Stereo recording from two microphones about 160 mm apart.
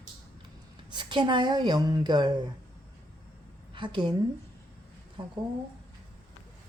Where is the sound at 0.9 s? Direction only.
30° right (ahead or behind).